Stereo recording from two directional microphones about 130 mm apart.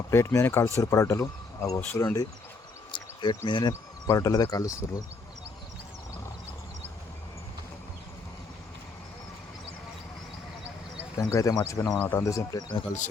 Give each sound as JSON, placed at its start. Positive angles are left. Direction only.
{"t": 0.1, "sound": "speech", "side_deg": 20}
{"t": 2.9, "sound": "cricket", "side_deg": 40}
{"t": 3.7, "sound": "speech", "side_deg": 25}
{"t": 11.2, "sound": "speech", "side_deg": 25}
{"t": 11.9, "sound": "speech", "side_deg": 10}
{"t": 12.1, "sound": "speech", "side_deg": 25}